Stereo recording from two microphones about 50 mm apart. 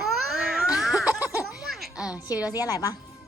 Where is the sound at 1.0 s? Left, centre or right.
Right.